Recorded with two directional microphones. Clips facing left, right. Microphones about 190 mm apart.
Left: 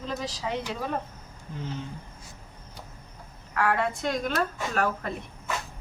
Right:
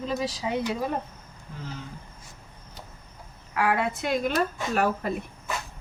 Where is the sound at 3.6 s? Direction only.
10° right (ahead or behind).